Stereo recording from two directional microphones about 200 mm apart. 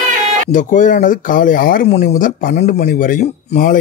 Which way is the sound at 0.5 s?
40° left (ahead or behind).